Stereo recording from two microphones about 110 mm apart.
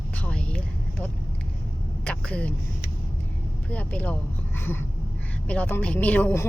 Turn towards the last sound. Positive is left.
turn(degrees=15)  # may be behind; listen again after turning